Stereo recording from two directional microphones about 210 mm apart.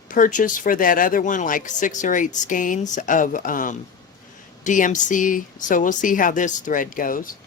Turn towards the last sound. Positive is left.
turn(degrees=40)  # may be behind; listen again after turning